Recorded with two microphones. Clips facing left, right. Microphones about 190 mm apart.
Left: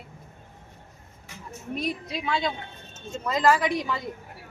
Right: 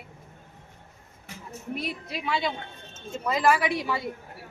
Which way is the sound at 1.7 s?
20° left (ahead or behind).